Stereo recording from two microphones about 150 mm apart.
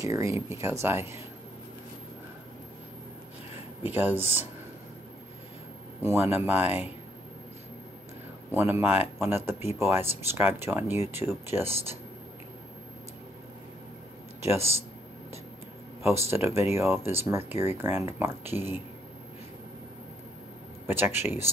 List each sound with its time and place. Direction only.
0.0 s speech: 20° right (ahead or behind)
3.8 s speech: 10° right (ahead or behind)
6.0 s speech: 15° right (ahead or behind)
8.5 s speech: 15° right (ahead or behind)
14.4 s a man's voice: 15° right (ahead or behind)
16.3 s speech: 15° right (ahead or behind)
20.8 s speech: 15° right (ahead or behind)